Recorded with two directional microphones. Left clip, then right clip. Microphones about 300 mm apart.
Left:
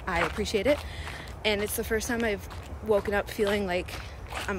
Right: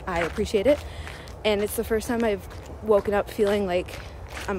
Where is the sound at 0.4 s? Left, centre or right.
Centre.